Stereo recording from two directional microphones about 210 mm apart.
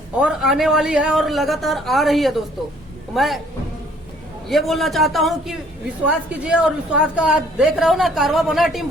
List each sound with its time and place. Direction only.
0.2 s a woman's voice: 5° right (ahead or behind)
4.4 s a woman's voice: centre (ahead or behind)